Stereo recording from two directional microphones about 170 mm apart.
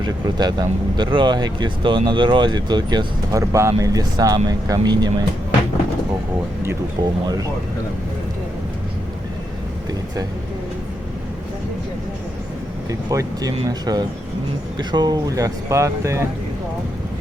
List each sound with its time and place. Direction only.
0.0 s speech: 25° right (ahead or behind)
6.7 s speech: 25° right (ahead or behind)
12.9 s speech: 20° right (ahead or behind)